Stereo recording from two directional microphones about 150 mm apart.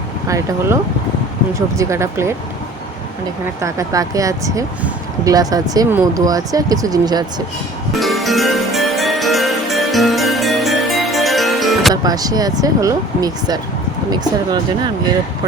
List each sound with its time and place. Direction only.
0.3 s speech: 20° right (ahead or behind)
3.6 s speech: 20° right (ahead or behind)
7.9 s music: centre (ahead or behind)
12.0 s speech: 25° right (ahead or behind)